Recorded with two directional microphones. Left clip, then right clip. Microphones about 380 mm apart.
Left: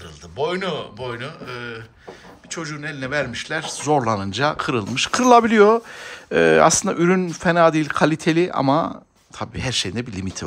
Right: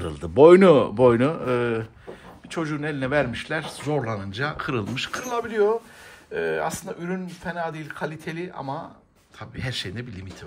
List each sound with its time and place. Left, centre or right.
0.0 s speech: centre
2.5 s speech: centre